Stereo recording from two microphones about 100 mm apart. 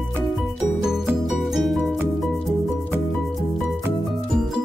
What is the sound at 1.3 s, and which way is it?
Music, centre (ahead or behind).